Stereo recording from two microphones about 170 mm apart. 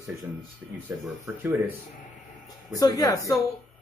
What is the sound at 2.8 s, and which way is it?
Speech, 20° left (ahead or behind).